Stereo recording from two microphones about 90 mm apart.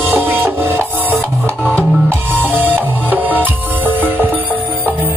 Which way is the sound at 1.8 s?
15° left (ahead or behind).